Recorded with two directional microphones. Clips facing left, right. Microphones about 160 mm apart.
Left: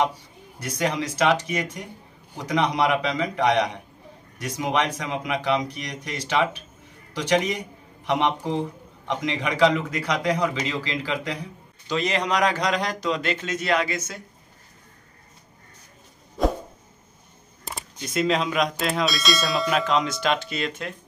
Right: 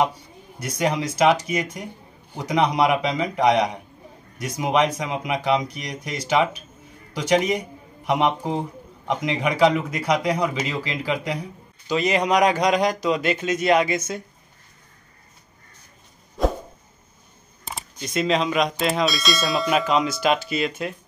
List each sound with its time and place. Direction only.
0.6 s a man's voice: 15° right (ahead or behind)
17.6 s speech: centre (ahead or behind)